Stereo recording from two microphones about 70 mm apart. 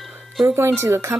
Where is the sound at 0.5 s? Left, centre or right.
Right.